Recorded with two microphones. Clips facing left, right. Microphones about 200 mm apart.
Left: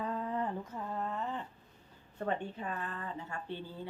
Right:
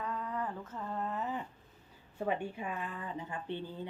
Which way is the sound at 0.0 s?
30° left (ahead or behind).